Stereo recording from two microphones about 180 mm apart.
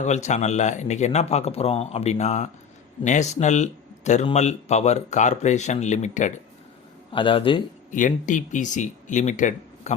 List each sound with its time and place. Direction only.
0.0 s speech: 40° left (ahead or behind)
7.1 s a man's voice: 30° left (ahead or behind)
7.9 s speech: 45° left (ahead or behind)